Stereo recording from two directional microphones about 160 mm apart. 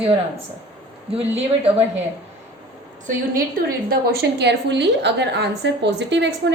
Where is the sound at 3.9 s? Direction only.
85° right.